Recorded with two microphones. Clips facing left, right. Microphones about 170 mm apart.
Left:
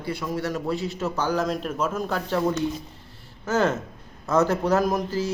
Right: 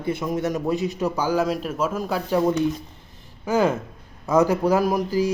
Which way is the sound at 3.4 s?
10° right (ahead or behind).